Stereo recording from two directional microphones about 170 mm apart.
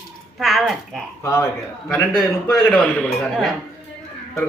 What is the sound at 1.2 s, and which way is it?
Speech, 15° left (ahead or behind).